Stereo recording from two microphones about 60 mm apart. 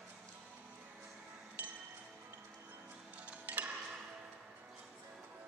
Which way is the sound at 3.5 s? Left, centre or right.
Right.